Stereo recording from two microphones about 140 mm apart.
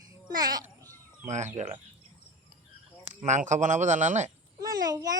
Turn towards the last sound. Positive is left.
turn(degrees=-25)  # may be behind; listen again after turning